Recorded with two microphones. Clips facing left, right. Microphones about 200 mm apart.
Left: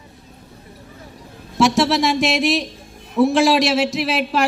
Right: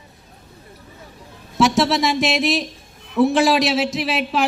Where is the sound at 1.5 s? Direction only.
Centre (ahead or behind).